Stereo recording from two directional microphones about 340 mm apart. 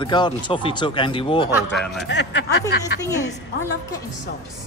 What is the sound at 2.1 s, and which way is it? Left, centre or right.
Speech, left.